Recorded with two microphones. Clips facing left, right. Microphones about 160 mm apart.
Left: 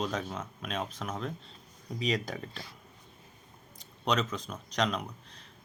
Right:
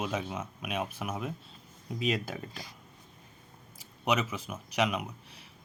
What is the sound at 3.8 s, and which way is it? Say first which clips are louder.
Speech: even; 10° right (ahead or behind).